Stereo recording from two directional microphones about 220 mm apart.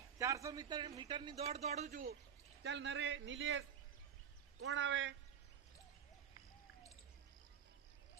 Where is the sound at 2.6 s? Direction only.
55° right (ahead or behind).